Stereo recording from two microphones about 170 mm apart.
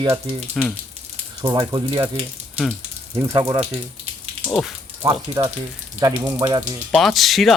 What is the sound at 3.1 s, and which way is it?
Speech, 15° right (ahead or behind).